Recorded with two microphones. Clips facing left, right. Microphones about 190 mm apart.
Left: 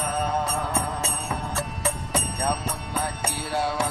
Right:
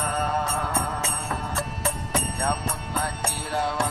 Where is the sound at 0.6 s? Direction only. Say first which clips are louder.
Even; 15° left (ahead or behind).